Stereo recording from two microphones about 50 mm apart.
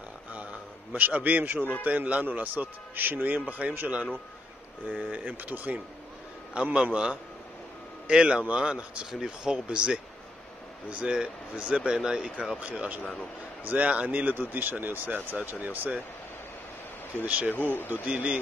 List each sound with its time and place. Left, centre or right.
0.3 s a man's voice: right
6.5 s speech: right
11.0 s speech: centre
12.5 s speech: right
13.0 s a man's voice: left
13.7 s speech: right
14.5 s speech: right
17.5 s speech: left
18.0 s speech: right